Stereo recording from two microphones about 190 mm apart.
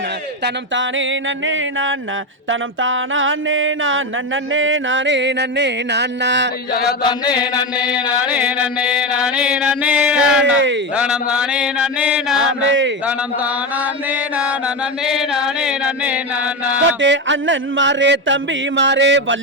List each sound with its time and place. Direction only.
0.4 s music: 80° right
1.5 s mantra: 90° right
4.5 s music: 90° right; by 6.5 s 65° right (ahead or behind)
7.0 s chant: 20° left (ahead or behind)
7.9 s mantra: 5° right (ahead or behind)
12.4 s music: 80° right
14.1 s mantra: 5° right (ahead or behind)
16.7 s music: 70° right (ahead or behind)